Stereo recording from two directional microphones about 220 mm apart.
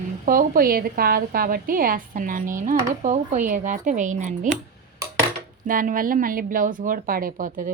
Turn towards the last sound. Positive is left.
turn(degrees=-35)  # may be behind; listen again after turning